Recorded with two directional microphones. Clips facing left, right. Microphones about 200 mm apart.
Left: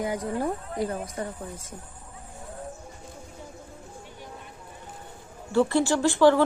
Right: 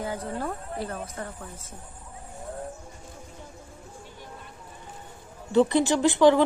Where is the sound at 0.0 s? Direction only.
15° left (ahead or behind).